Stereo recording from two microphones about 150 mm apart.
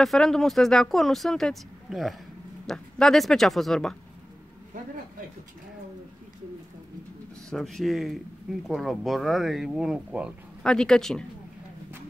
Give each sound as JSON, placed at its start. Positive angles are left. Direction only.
{"t": 0.0, "sound": "speech", "side_deg": 0}
{"t": 7.4, "sound": "speech", "side_deg": 0}
{"t": 10.6, "sound": "speech", "side_deg": 5}